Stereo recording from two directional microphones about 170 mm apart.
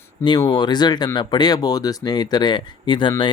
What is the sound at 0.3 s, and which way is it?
Speech, 25° left (ahead or behind).